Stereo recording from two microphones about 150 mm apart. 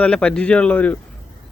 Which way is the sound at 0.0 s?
5° left (ahead or behind).